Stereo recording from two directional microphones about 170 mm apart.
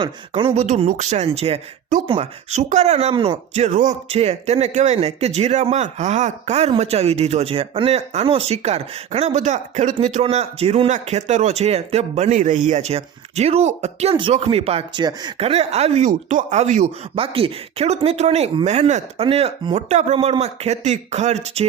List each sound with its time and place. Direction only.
0.0 s speech: 30° right (ahead or behind)